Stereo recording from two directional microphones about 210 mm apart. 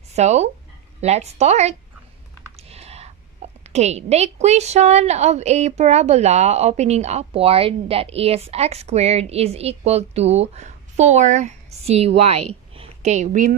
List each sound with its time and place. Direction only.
0.1 s a woman's voice: 30° right (ahead or behind)
2.5 s typing: 30° right (ahead or behind)
3.4 s a sound: 30° right (ahead or behind)
3.7 s a woman's voice: 30° right (ahead or behind)